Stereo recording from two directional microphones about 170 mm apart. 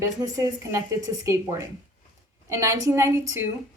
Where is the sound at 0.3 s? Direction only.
20° right (ahead or behind).